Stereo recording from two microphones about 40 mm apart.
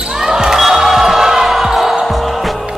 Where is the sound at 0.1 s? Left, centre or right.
Centre.